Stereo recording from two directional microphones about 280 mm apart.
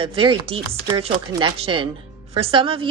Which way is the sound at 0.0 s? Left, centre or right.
Centre.